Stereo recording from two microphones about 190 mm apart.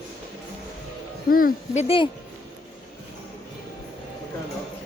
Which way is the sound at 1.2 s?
50° left (ahead or behind).